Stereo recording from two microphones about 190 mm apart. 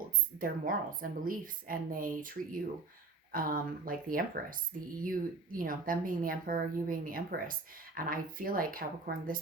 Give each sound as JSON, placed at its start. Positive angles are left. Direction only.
{"t": 0.3, "sound": "speech", "side_deg": -50}